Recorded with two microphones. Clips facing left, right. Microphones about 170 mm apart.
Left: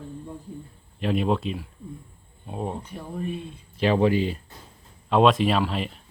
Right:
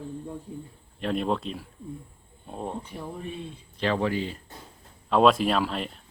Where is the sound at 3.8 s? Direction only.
15° left (ahead or behind).